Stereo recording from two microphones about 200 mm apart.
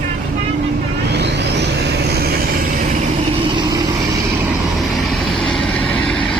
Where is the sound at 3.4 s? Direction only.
20° right (ahead or behind).